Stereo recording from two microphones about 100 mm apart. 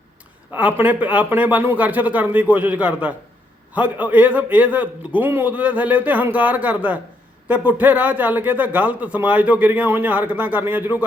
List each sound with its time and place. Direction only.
0.5 s a man's voice: 20° right (ahead or behind)